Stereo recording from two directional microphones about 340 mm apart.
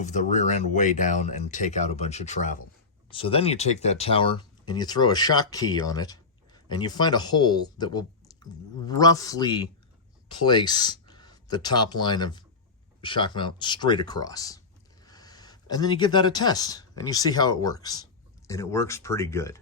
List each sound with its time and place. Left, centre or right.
0.0 s speech: left